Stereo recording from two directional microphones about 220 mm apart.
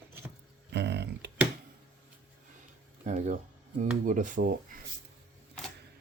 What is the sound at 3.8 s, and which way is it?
Speech, 35° right (ahead or behind).